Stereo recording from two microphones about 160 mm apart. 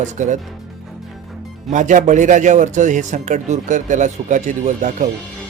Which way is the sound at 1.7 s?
50° right (ahead or behind).